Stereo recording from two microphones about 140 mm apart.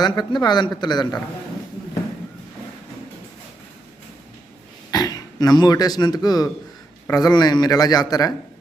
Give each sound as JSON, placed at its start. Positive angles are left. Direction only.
{"t": 0.0, "sound": "speech", "side_deg": 30}
{"t": 4.9, "sound": "a man's voice", "side_deg": 25}